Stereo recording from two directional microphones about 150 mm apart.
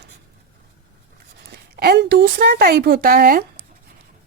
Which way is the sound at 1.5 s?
90° right.